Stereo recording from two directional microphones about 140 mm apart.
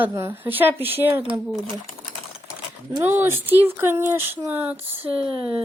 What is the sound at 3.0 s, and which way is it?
Speech, 15° right (ahead or behind).